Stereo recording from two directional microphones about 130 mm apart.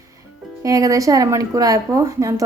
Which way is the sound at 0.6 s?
25° right (ahead or behind).